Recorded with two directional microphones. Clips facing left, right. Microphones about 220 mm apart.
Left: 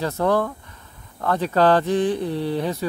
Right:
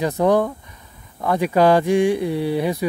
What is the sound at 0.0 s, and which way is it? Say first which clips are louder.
Speech: right 4 dB; 15° right (ahead or behind).